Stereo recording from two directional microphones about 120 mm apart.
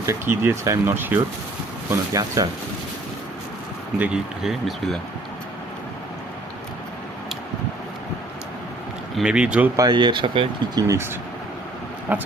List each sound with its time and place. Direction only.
0.0 s speech: 20° right (ahead or behind)
3.9 s speech: 10° right (ahead or behind)
9.1 s speech: 5° right (ahead or behind)
9.7 s speech: 35° right (ahead or behind)
10.8 s speech: 25° right (ahead or behind)
12.1 s speech: 15° right (ahead or behind)